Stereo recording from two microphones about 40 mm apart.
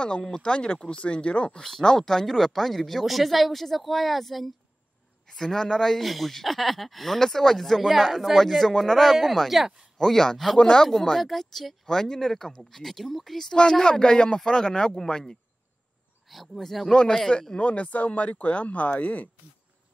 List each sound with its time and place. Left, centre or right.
0.2 s speech: centre
1.6 s speech: centre
9.9 s speech: centre
10.6 s speech: centre
10.9 s speech: centre
16.3 s speech: centre
16.9 s speech: centre
17.6 s speech: left